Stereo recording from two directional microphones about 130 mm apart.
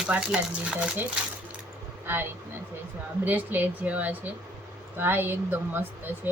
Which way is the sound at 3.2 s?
15° right (ahead or behind).